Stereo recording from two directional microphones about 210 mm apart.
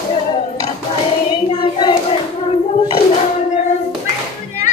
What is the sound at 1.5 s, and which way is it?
Child singing, 20° left (ahead or behind).